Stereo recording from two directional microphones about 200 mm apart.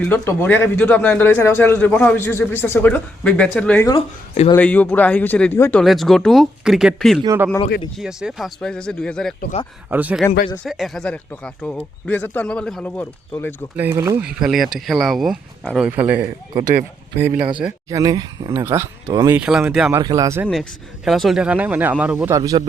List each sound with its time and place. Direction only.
0.0 s a man's voice: 10° left (ahead or behind)
3.8 s speech: 25° left (ahead or behind)
4.5 s a man's voice: 10° left (ahead or behind)
7.2 s speech: 15° right (ahead or behind)
7.9 s speech: centre (ahead or behind)
9.9 s speech: 5° right (ahead or behind); by 13.6 s 10° left (ahead or behind)
13.7 s speech: 10° right (ahead or behind)
14.3 s speech: centre (ahead or behind)
17.8 s speech: 20° right (ahead or behind)
19.4 s speech: 5° right (ahead or behind)
19.9 s speech: 20° right (ahead or behind)
20.5 s speech: centre (ahead or behind)
22.4 s speech: 20° right (ahead or behind)